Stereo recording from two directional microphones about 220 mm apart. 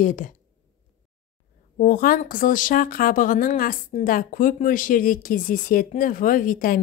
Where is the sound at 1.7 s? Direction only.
40° left (ahead or behind).